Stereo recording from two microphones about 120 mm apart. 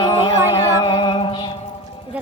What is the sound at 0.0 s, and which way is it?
Music, 40° left (ahead or behind).